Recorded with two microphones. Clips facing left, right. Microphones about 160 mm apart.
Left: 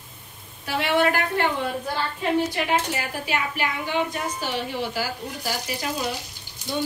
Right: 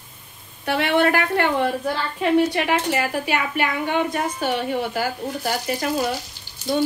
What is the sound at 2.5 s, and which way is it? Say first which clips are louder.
A woman's voice: right 3 dB; 65° right (ahead or behind).